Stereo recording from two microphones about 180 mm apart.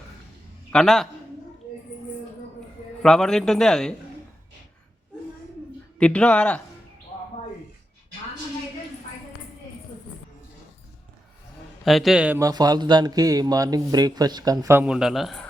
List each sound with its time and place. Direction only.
0.7 s a man's voice: 5° left (ahead or behind)
3.0 s a man's voice: 5° left (ahead or behind)
6.0 s speech: 5° left (ahead or behind)
11.9 s a man's voice: centre (ahead or behind)
12.4 s speech: 20° right (ahead or behind); by 15.4 s centre (ahead or behind)